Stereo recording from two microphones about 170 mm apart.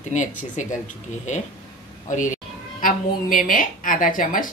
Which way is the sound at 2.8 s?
55° left (ahead or behind).